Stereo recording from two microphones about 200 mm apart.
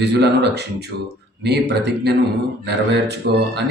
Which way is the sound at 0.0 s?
55° right (ahead or behind).